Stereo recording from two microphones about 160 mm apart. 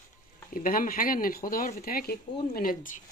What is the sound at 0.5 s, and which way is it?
Speech, 60° left (ahead or behind).